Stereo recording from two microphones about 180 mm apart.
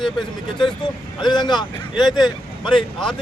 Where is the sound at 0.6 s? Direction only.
25° left (ahead or behind).